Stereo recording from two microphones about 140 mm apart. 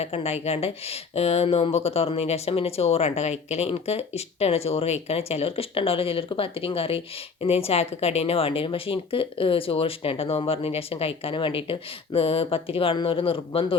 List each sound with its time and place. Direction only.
0.0 s speech: 50° left (ahead or behind)